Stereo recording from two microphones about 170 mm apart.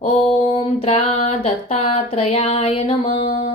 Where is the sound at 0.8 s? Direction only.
40° left (ahead or behind).